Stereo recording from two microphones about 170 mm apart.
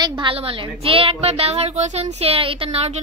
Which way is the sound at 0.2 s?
30° right (ahead or behind).